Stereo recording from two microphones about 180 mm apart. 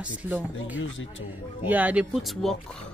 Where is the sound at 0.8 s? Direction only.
90° left.